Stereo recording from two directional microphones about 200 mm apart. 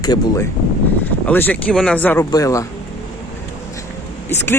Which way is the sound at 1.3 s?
10° left (ahead or behind).